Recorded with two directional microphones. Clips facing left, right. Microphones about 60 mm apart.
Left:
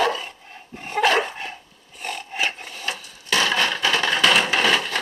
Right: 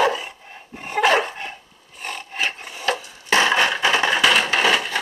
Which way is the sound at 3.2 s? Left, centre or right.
Right.